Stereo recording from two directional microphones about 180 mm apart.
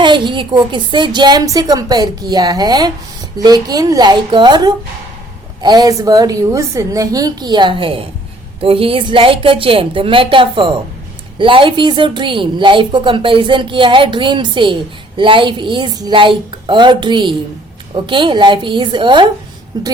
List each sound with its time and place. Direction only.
0.0 s a woman's voice: 25° right (ahead or behind)